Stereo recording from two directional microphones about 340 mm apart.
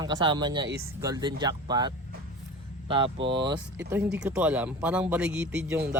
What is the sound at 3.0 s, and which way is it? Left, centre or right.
Speech, right.